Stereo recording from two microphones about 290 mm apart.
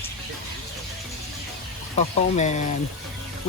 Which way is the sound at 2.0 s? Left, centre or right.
Left.